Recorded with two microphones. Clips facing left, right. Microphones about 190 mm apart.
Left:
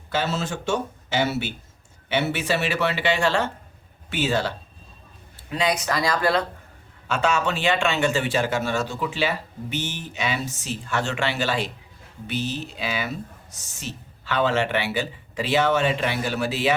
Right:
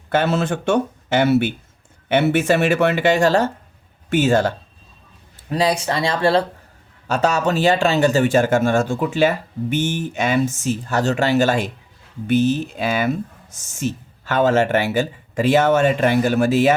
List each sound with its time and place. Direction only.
0.1 s speech: 55° right (ahead or behind)
5.5 s speech: 35° right (ahead or behind)
7.1 s speech: 40° right (ahead or behind)